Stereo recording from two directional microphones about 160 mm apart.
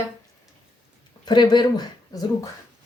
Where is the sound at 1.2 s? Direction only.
25° left (ahead or behind).